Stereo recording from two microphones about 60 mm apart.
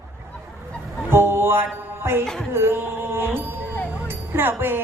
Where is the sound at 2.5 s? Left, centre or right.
Right.